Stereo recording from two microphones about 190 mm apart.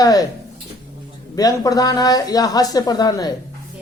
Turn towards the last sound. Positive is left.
turn(degrees=20)  # may be behind; listen again after turning